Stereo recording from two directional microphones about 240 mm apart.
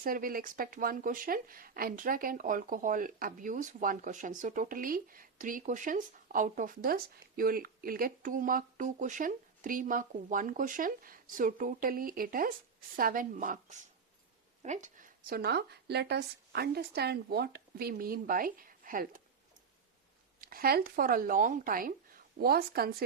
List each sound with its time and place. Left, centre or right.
0.0 s speech: right
20.4 s speech: right